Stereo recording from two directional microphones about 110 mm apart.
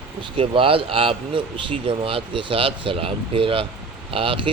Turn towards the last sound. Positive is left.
turn(degrees=-55)  # may be behind; listen again after turning